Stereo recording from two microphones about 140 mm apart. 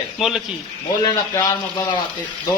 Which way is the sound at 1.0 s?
30° left (ahead or behind).